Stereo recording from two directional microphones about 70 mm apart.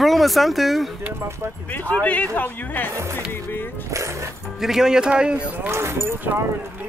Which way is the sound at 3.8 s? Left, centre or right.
Right.